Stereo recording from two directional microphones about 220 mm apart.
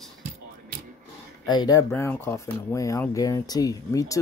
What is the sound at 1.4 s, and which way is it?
Speech, 20° left (ahead or behind).